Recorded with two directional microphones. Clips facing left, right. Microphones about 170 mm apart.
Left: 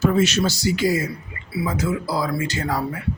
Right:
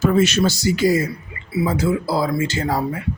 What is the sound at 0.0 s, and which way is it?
Speech, 55° right (ahead or behind).